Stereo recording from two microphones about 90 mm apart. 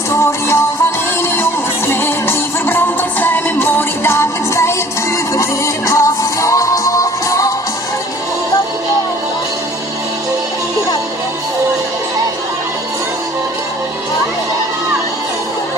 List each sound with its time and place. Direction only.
0.1 s music: 30° left (ahead or behind)